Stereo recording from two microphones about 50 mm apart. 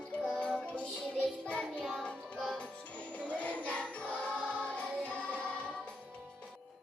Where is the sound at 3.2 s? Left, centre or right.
Left.